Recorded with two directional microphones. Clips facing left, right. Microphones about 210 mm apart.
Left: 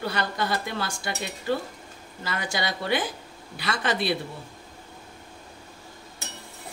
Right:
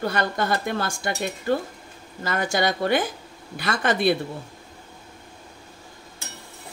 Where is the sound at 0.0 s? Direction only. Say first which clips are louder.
Right 4 dB; 50° right (ahead or behind).